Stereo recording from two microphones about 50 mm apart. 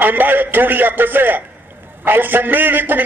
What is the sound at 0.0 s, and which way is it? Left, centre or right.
A man's voice, right.